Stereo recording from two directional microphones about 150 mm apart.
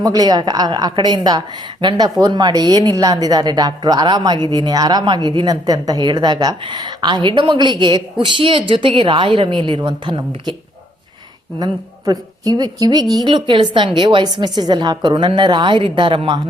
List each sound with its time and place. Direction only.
0.0 s a woman's voice: 25° right (ahead or behind)
11.6 s a woman's voice: 25° right (ahead or behind)